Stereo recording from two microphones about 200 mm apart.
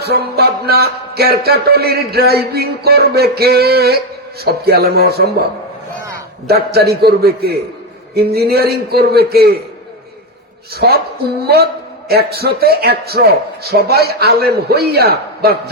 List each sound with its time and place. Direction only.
0.0 s a man's voice: 55° right (ahead or behind)
6.5 s a man's voice: 50° right (ahead or behind)
10.8 s a man's voice: 50° right (ahead or behind)